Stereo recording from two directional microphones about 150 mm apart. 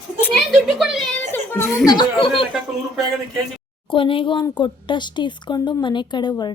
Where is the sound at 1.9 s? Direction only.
30° left (ahead or behind).